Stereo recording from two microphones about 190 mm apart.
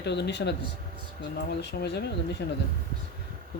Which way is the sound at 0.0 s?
65° left (ahead or behind).